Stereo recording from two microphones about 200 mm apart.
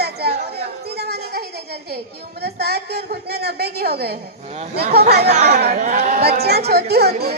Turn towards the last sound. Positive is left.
turn(degrees=-55)  # may be behind; listen again after turning